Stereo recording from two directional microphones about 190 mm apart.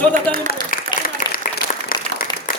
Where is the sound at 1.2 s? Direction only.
45° left (ahead or behind).